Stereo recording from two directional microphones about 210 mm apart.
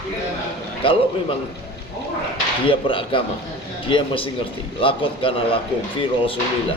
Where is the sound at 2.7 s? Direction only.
25° left (ahead or behind).